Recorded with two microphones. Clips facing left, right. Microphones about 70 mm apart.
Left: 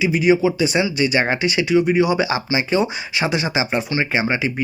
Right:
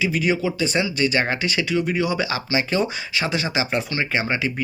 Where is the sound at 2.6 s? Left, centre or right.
Centre.